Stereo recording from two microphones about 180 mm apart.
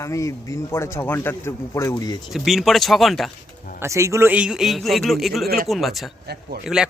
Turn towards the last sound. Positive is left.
turn(degrees=-5)  # may be behind; listen again after turning